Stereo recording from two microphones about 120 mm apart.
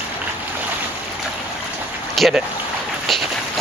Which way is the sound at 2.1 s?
Centre (ahead or behind).